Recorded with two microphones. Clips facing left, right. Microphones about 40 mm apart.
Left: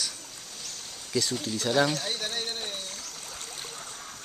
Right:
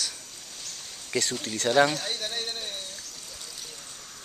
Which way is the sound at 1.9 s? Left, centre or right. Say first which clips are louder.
Even; centre.